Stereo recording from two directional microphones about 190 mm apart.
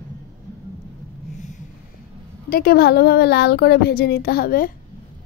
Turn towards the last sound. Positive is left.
turn(degrees=50)  # may be behind; listen again after turning